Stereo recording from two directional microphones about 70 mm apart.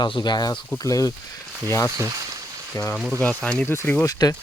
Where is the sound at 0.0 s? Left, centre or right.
Left.